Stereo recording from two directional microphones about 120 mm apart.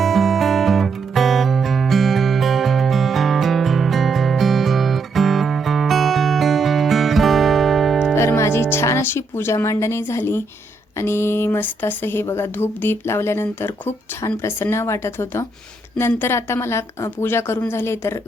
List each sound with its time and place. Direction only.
0.0 s music: centre (ahead or behind)
8.1 s music: 20° left (ahead or behind)
10.9 s speech: 20° left (ahead or behind)